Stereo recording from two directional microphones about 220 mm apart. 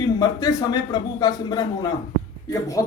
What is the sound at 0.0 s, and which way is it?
Speech, 15° left (ahead or behind).